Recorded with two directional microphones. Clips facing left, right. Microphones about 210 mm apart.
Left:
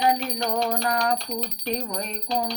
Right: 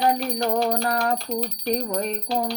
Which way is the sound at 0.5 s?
40° right (ahead or behind).